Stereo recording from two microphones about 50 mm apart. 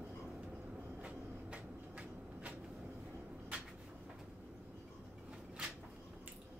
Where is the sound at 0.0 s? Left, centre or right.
Right.